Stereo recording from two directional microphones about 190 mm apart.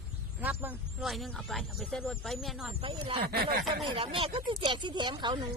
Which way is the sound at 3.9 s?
30° right (ahead or behind).